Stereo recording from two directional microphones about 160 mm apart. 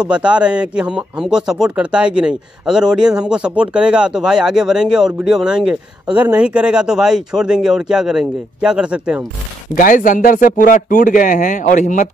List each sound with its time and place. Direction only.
0.0 s speech: 5° right (ahead or behind)
9.8 s speech: 55° left (ahead or behind)